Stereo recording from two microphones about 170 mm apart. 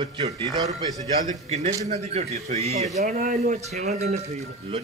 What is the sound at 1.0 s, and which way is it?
A man's voice, 40° right (ahead or behind).